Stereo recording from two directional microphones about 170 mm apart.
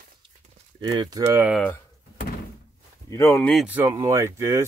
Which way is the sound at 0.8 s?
25° right (ahead or behind).